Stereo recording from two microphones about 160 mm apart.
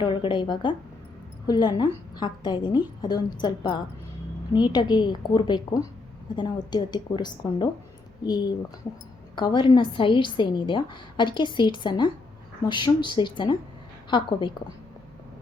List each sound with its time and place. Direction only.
0.0 s a woman's voice: 30° left (ahead or behind)